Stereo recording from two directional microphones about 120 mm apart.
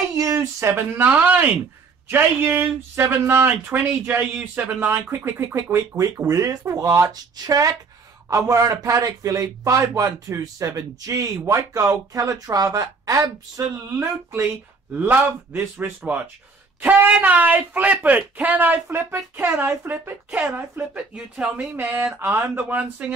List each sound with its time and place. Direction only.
0.2 s speech: 25° right (ahead or behind)
15.0 s speech: 15° right (ahead or behind)